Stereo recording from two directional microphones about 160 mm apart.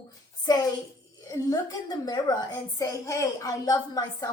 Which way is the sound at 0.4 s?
25° left (ahead or behind).